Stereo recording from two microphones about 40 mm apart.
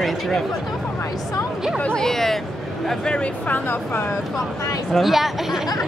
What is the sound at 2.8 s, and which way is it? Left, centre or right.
Speech, left.